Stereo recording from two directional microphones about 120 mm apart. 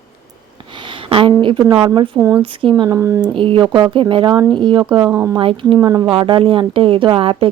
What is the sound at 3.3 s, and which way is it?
Speech, 45° right (ahead or behind).